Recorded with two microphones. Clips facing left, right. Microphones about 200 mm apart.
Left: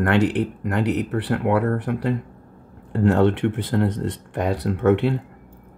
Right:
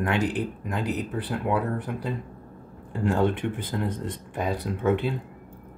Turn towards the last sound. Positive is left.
turn(degrees=70)  # may be behind; listen again after turning